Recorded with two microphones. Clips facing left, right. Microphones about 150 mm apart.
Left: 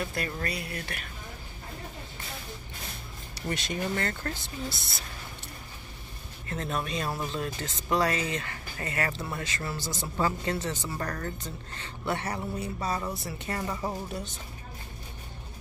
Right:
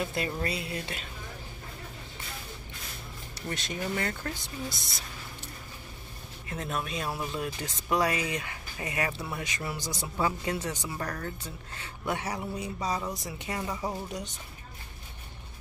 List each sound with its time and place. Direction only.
0.0 s speech: 20° right (ahead or behind)
3.4 s speech: centre (ahead or behind)
6.4 s speech: 5° right (ahead or behind)